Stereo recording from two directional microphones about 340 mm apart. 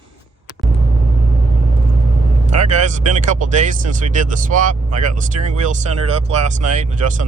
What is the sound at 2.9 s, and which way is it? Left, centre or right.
Speech, right.